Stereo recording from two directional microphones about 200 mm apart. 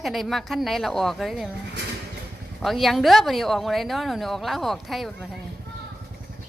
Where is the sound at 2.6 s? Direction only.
Centre (ahead or behind).